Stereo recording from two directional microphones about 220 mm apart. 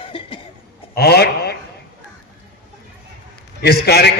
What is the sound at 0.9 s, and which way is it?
Speech, 45° left (ahead or behind).